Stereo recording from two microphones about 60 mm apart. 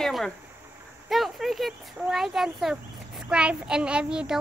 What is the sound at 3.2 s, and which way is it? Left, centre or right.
A child's voice, centre.